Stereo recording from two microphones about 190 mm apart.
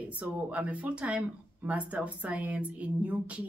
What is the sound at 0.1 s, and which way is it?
Speech, 5° right (ahead or behind).